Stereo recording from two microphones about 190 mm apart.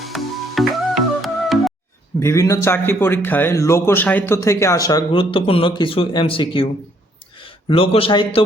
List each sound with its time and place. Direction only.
0.0 s music: centre (ahead or behind)
2.1 s a man's voice: 15° left (ahead or behind)